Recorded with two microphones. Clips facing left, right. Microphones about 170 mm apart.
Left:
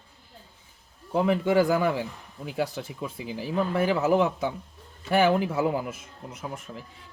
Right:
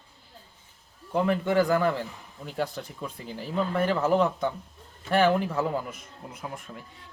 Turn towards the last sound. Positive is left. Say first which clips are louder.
# left 2 dB
turn(degrees=0)  # may be behind; listen again after turning